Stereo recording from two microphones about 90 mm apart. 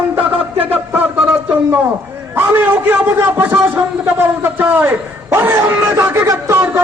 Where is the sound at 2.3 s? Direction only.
25° right (ahead or behind).